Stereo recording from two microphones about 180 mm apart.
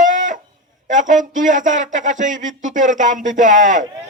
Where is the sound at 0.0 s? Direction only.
45° right (ahead or behind).